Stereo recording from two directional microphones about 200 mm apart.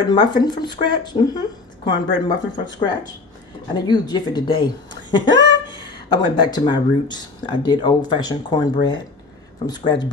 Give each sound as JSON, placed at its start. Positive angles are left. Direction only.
{"t": 0.0, "sound": "speech", "side_deg": 20}